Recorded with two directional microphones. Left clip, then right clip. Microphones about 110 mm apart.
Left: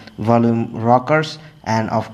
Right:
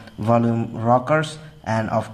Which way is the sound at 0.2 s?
20° left (ahead or behind).